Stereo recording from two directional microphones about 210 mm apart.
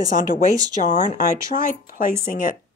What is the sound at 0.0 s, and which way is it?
Speech, 40° left (ahead or behind).